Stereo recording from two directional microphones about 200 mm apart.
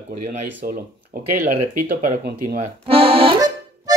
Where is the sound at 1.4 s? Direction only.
40° right (ahead or behind).